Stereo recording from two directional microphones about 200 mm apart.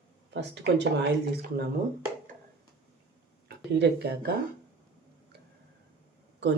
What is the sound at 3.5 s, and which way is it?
Speech, 55° right (ahead or behind).